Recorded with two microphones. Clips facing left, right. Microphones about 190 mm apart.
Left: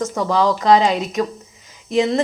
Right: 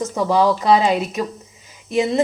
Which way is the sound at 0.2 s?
25° right (ahead or behind).